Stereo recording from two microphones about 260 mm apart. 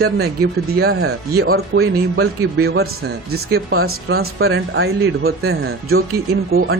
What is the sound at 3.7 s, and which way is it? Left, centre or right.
Speech, right.